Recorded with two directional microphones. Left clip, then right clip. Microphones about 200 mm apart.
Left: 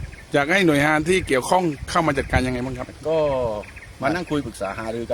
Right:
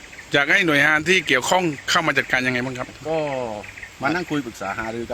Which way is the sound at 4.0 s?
35° left (ahead or behind).